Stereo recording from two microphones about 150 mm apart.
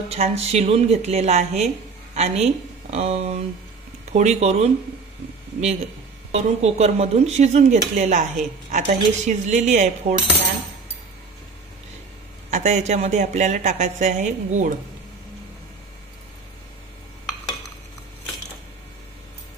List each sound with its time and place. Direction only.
0.1 s speech: 45° right (ahead or behind)
6.3 s speech: 50° right (ahead or behind)
12.4 s speech: 50° right (ahead or behind)